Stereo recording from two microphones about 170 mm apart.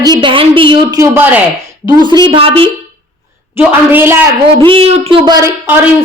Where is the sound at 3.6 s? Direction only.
10° right (ahead or behind).